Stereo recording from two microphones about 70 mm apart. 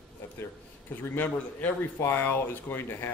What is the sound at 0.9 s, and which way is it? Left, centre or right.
A man's voice, left.